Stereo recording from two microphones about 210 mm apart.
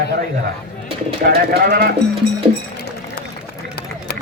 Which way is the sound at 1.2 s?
50° right (ahead or behind).